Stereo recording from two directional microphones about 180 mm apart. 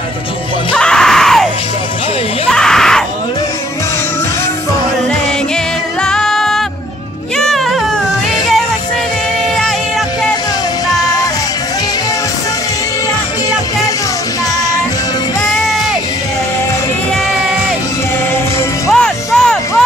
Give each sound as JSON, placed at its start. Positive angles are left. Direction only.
{"t": 0.7, "sound": "screaming", "side_deg": 5}
{"t": 2.5, "sound": "a sound", "side_deg": 5}
{"t": 6.0, "sound": "music", "side_deg": 5}
{"t": 10.9, "sound": "music", "side_deg": 20}
{"t": 18.9, "sound": "music", "side_deg": 5}